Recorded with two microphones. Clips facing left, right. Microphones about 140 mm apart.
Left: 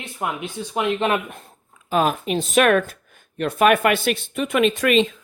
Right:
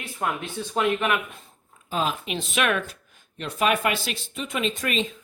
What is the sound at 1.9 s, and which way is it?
Speech, 60° left (ahead or behind).